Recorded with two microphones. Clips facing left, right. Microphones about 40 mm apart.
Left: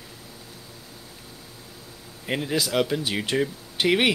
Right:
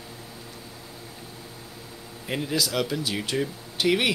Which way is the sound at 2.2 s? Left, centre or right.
Centre.